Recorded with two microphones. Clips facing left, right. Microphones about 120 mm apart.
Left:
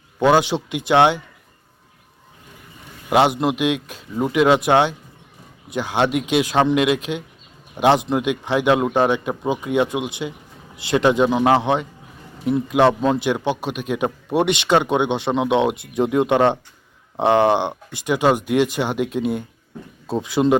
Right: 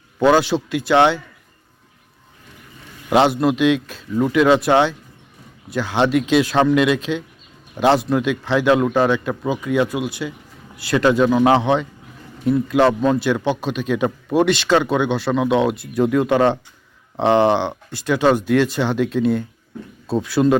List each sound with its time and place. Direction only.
0.2 s speech: 15° left (ahead or behind)
3.1 s speech: 15° left (ahead or behind)